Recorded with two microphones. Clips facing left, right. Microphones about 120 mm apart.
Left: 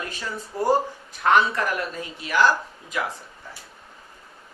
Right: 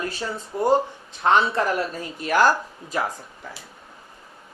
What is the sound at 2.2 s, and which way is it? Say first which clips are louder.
Speech: right 2 dB; 45° right (ahead or behind).